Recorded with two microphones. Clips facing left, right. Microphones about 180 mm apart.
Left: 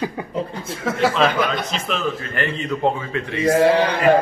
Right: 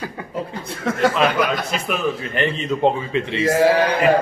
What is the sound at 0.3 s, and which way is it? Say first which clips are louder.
Speech: left 2 dB; centre (ahead or behind).